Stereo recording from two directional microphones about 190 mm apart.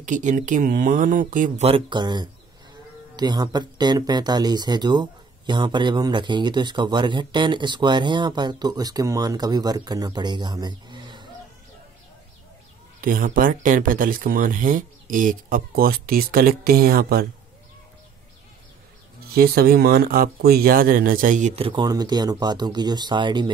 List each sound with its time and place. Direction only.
0.0 s speech: 40° right (ahead or behind)
1.7 s speech: 25° right (ahead or behind)
13.0 s speech: 45° right (ahead or behind)
19.3 s speech: 50° right (ahead or behind); by 23.5 s 25° right (ahead or behind)